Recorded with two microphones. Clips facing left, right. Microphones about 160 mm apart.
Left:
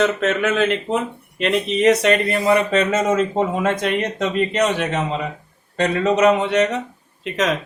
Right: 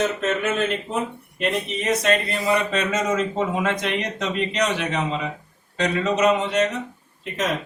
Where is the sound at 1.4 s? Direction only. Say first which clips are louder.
Left 6 dB; 85° left.